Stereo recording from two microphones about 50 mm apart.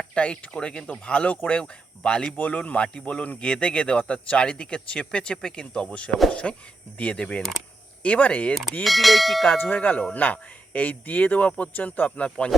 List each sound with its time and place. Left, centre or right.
0.0 s speech: centre
8.8 s speech: centre
9.6 s speech: left